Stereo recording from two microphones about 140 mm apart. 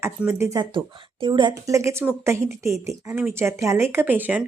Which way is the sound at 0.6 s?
35° right (ahead or behind).